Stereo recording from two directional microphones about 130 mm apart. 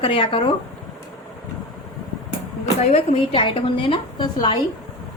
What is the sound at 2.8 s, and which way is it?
A woman's voice, 45° left (ahead or behind).